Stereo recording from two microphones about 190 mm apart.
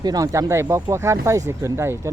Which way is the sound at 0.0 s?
20° right (ahead or behind).